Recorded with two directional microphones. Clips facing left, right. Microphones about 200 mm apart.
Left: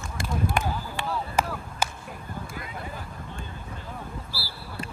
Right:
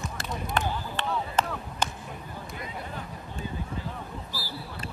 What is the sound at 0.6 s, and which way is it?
Chop, 5° left (ahead or behind).